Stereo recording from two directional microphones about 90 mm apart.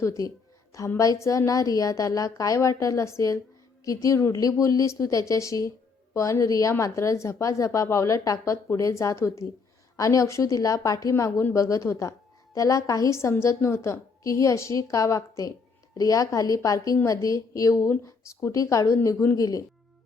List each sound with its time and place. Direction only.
0.0 s a sound: 40° left (ahead or behind)
0.9 s a woman's voice: 40° left (ahead or behind)
11.1 s a woman's voice: 30° left (ahead or behind)